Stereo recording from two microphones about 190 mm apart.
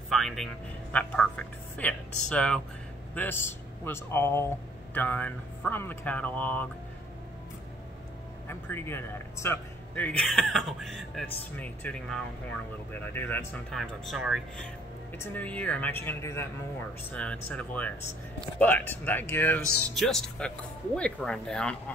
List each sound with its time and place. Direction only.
0.1 s music: centre (ahead or behind)
0.9 s a man's voice: 5° left (ahead or behind)
8.5 s a man's voice: 10° left (ahead or behind)
15.1 s a man's voice: 10° left (ahead or behind)